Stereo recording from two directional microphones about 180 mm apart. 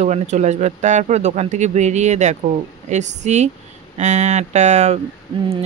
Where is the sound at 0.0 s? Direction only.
40° right (ahead or behind).